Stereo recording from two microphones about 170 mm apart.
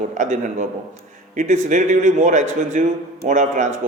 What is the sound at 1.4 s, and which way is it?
A man's voice, 45° right (ahead or behind).